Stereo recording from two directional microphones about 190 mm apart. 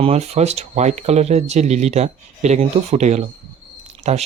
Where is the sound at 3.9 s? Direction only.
35° right (ahead or behind).